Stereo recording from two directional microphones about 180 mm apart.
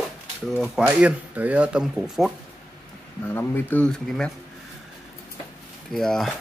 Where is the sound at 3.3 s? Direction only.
10° left (ahead or behind).